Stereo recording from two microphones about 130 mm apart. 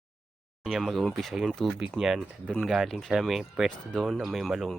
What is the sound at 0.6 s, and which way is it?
Speech, centre (ahead or behind).